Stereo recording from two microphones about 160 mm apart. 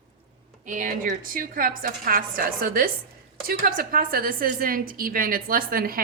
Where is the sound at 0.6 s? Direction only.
55° right (ahead or behind).